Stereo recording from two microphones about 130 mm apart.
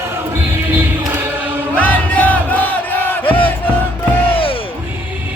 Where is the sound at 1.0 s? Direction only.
15° right (ahead or behind).